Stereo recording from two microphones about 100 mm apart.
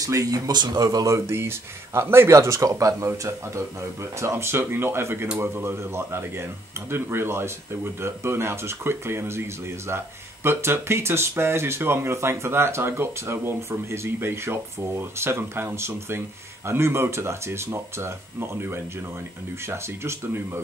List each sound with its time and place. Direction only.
0.0 s speech: 35° right (ahead or behind)